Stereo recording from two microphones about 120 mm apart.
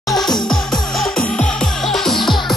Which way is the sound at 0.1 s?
5° left (ahead or behind).